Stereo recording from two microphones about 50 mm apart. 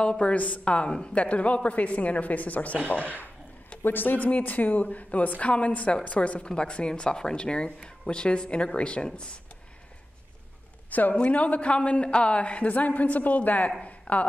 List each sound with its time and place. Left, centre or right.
0.0 s a woman's voice: centre
3.8 s a woman's voice: left
4.2 s a woman's voice: left
10.9 s a man's voice: left